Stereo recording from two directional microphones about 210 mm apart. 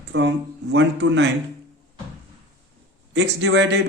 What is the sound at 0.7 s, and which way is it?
Speech, 60° right (ahead or behind).